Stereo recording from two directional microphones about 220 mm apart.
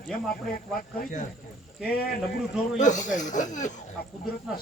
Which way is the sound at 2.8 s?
35° left (ahead or behind).